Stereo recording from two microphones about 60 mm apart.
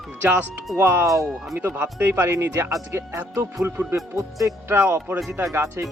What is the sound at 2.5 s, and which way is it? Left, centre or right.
Speech, right.